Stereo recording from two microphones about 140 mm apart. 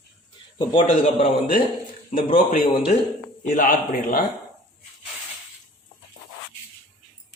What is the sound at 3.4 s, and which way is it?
Speech, 75° left (ahead or behind).